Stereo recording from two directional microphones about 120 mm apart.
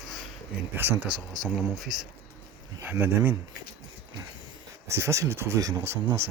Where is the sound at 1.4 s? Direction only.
Centre (ahead or behind).